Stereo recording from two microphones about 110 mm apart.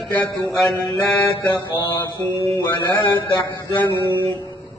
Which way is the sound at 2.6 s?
30° left (ahead or behind).